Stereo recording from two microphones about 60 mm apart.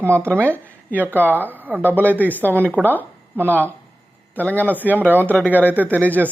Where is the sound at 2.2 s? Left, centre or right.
Left.